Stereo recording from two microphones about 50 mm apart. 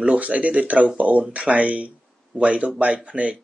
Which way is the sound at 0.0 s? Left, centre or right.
Right.